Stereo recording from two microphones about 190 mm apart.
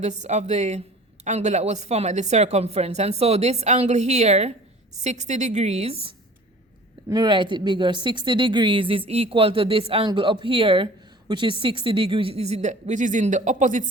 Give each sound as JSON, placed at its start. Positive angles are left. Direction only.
{"t": 0.0, "sound": "speech", "side_deg": -35}